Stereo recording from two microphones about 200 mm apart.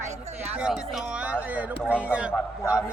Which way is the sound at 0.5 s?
5° right (ahead or behind).